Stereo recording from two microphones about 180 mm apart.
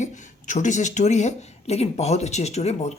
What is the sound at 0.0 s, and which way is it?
Speech, 45° left (ahead or behind).